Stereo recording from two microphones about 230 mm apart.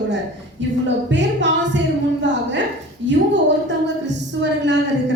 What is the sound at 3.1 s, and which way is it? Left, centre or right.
A woman's voice, right.